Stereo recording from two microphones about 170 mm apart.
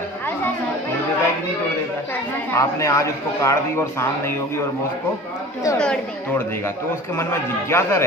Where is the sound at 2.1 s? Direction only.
15° left (ahead or behind).